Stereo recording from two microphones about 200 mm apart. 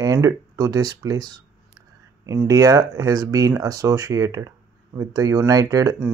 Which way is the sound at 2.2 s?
15° right (ahead or behind).